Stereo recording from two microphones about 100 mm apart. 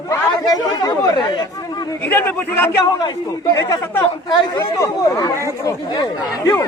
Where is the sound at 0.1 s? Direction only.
40° left (ahead or behind).